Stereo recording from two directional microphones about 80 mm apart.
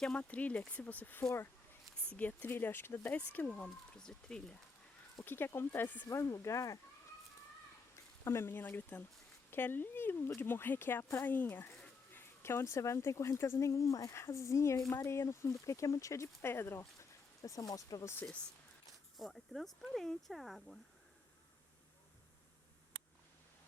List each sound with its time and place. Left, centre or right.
0.0 s speech: centre
5.2 s speech: left
6.1 s speech: left
8.2 s speech: left
19.1 s speech: centre